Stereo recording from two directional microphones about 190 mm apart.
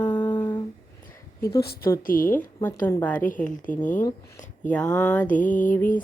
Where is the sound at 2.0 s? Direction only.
45° left (ahead or behind).